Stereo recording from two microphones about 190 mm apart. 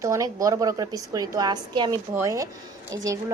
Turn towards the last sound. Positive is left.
turn(degrees=-20)  # may be behind; listen again after turning